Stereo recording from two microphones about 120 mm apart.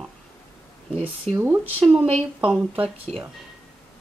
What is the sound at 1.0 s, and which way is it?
Speech, 15° right (ahead or behind).